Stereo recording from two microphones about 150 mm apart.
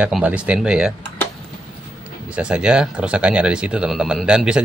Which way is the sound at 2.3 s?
5° right (ahead or behind).